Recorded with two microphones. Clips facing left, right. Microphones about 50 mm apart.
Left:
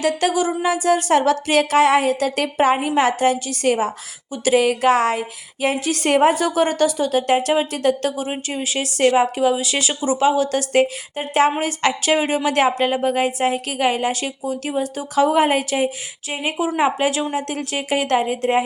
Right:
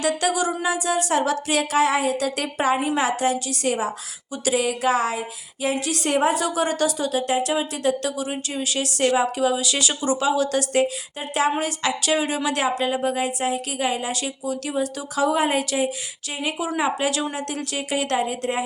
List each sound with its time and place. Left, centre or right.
0.0 s a woman's voice: left
5.6 s a woman's voice: left
9.9 s speech: centre
10.2 s a woman's voice: left